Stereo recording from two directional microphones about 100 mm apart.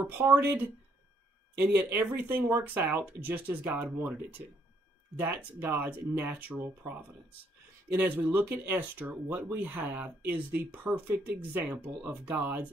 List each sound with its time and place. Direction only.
0.2 s speech: 20° right (ahead or behind)
5.1 s speech: 20° right (ahead or behind)
7.9 s speech: 20° right (ahead or behind)